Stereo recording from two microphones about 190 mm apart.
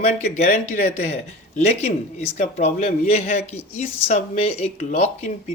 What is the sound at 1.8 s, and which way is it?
Speech, 35° left (ahead or behind).